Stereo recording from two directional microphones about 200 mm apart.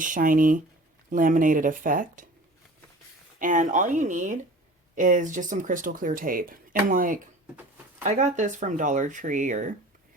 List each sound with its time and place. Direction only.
0.0 s speech: 40° right (ahead or behind)
3.3 s speech: 40° right (ahead or behind)